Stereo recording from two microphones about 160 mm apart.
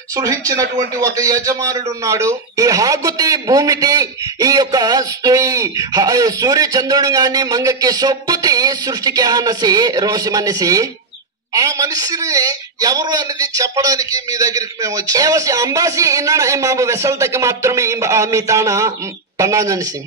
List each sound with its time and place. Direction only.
0.1 s a man's voice: 20° right (ahead or behind)